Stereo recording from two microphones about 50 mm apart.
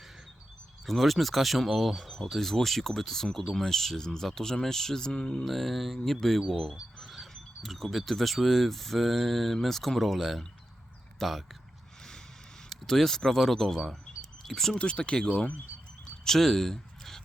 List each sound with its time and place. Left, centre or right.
0.9 s speech: centre
5.5 s speech: centre
12.7 s speech: centre
14.8 s speech: left
16.2 s speech: centre